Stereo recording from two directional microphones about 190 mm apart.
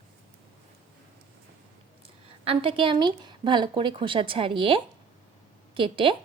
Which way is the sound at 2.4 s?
30° right (ahead or behind).